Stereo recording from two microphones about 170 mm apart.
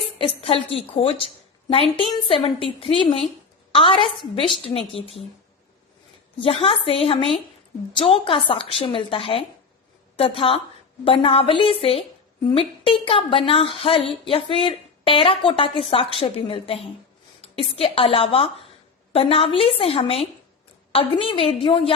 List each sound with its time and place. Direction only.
0.2 s a woman's voice: 35° left (ahead or behind)
6.4 s a woman's voice: 35° left (ahead or behind)